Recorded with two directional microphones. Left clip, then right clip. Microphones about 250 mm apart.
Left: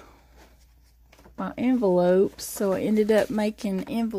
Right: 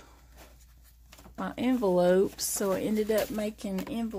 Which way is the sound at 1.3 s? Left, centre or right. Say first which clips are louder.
Left 4 dB; centre.